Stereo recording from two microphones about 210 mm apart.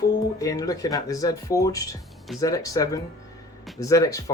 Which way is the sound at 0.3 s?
15° left (ahead or behind).